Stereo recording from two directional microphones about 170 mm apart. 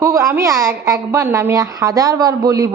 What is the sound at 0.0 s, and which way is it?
A woman's voice, 20° right (ahead or behind).